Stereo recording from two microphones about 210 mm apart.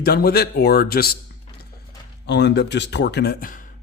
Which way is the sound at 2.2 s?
55° left (ahead or behind).